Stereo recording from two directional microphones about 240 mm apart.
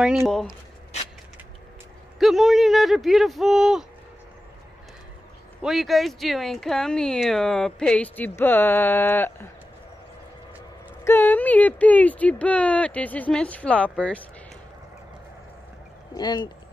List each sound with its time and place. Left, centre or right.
0.0 s speech: centre
2.1 s speech: centre
5.6 s speech: centre
11.1 s speech: centre
16.2 s speech: centre